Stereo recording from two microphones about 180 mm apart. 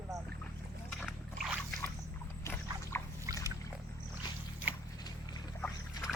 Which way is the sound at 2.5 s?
15° left (ahead or behind).